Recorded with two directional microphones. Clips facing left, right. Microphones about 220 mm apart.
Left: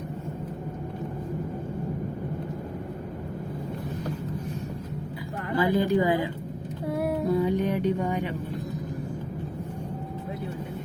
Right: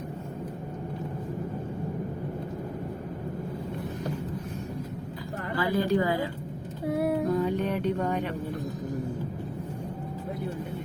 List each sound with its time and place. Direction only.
5.5 s speech: 20° left (ahead or behind)
7.3 s music: 10° left (ahead or behind)